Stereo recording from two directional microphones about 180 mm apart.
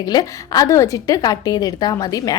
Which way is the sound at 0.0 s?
20° left (ahead or behind).